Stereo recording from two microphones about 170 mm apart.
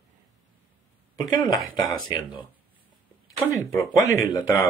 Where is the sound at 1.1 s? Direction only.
20° left (ahead or behind).